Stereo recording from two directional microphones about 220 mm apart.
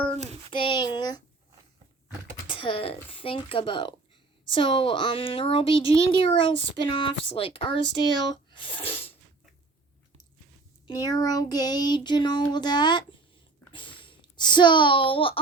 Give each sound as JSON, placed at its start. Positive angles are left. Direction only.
{"t": 0.2, "sound": "child singing", "side_deg": -30}
{"t": 0.5, "sound": "a child's voice", "side_deg": 20}
{"t": 2.5, "sound": "speech", "side_deg": 25}
{"t": 10.8, "sound": "speech", "side_deg": 15}